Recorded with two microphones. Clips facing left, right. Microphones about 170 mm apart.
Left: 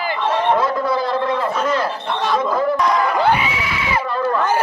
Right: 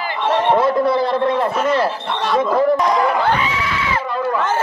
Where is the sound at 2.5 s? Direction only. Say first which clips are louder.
Right 5 dB; 25° right (ahead or behind).